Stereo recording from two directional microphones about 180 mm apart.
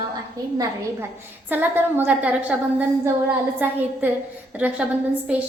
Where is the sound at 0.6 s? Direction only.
15° right (ahead or behind).